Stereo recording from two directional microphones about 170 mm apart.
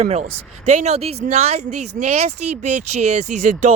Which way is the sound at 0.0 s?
40° right (ahead or behind).